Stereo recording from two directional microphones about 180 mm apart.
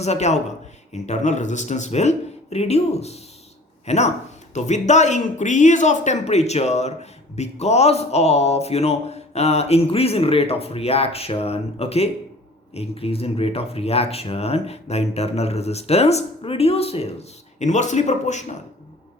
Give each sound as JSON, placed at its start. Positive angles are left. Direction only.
{"t": 0.0, "sound": "speech", "side_deg": 40}